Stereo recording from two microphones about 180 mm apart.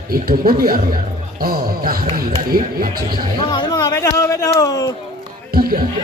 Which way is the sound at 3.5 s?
25° left (ahead or behind).